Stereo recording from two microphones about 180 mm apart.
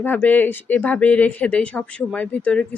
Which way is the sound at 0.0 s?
10° left (ahead or behind).